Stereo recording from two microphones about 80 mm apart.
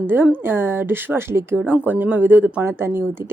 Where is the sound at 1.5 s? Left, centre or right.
Right.